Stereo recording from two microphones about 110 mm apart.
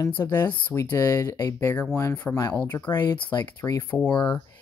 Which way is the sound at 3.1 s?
45° left (ahead or behind).